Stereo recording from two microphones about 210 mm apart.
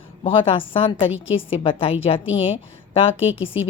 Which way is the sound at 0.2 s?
25° left (ahead or behind).